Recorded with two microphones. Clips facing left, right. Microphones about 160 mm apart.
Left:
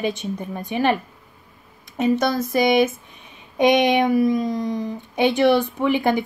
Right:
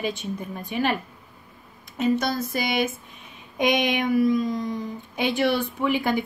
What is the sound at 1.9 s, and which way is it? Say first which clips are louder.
Speech: left 4 dB; 50° left (ahead or behind).